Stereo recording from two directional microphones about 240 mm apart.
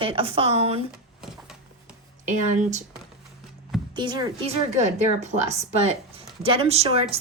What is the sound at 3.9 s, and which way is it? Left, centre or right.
Speech, centre.